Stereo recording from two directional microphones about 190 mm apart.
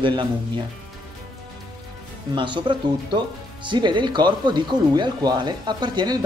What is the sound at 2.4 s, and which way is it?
Speech, 25° right (ahead or behind).